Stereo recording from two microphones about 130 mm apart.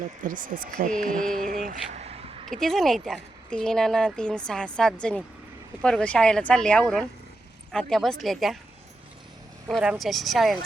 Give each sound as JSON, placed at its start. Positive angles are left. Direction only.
{"t": 0.2, "sound": "speech", "side_deg": -90}
{"t": 1.1, "sound": "speech", "side_deg": 5}
{"t": 1.5, "sound": "speech", "side_deg": -90}
{"t": 2.0, "sound": "a sound", "side_deg": -55}
{"t": 2.5, "sound": "speech", "side_deg": 5}
{"t": 9.8, "sound": "speech", "side_deg": -5}